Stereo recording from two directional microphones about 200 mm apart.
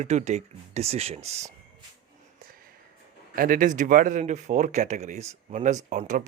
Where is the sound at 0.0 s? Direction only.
35° right (ahead or behind).